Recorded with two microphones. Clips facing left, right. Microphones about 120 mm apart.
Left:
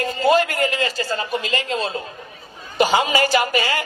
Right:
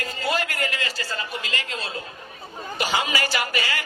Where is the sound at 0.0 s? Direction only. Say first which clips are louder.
Left 9 dB; 30° left (ahead or behind).